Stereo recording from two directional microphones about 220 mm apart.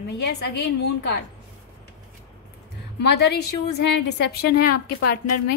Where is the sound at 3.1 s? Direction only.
50° left (ahead or behind).